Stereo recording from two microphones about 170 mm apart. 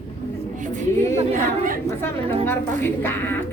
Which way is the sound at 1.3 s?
50° right (ahead or behind).